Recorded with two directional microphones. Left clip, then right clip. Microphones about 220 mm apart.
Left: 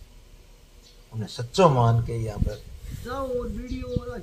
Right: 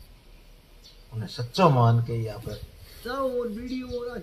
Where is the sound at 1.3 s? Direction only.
50° left (ahead or behind).